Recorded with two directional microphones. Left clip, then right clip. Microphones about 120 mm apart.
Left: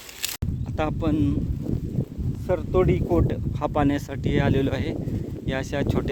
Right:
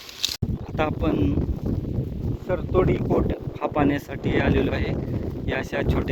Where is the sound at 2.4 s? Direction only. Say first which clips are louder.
Even; 40° left (ahead or behind).